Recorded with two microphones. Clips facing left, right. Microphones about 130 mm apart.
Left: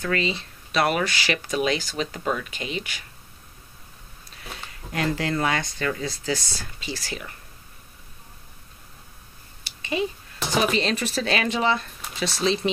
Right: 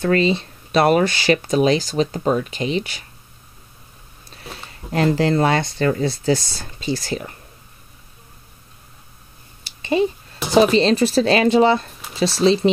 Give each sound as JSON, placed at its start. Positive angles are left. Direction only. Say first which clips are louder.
{"t": 0.0, "sound": "speech", "louder": "right 8 dB", "side_deg": -30}
{"t": 4.9, "sound": "speech", "louder": "right 8 dB", "side_deg": -35}
{"t": 10.5, "sound": "speech", "louder": "right 9 dB", "side_deg": -30}